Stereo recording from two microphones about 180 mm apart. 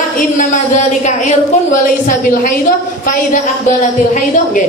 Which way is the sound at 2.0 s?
45° left (ahead or behind).